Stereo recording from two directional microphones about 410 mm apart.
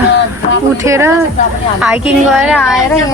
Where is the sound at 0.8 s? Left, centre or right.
Centre.